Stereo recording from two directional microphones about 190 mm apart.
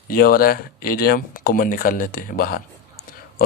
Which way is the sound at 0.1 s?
50° left (ahead or behind).